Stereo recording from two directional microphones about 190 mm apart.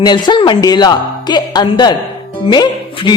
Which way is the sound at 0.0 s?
25° left (ahead or behind).